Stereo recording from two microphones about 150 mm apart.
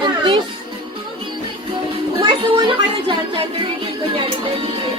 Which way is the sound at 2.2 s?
35° right (ahead or behind).